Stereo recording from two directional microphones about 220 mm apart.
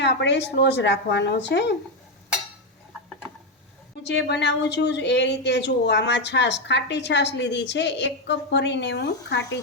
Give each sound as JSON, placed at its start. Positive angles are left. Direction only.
{"t": 0.0, "sound": "speech", "side_deg": 55}
{"t": 4.0, "sound": "speech", "side_deg": 50}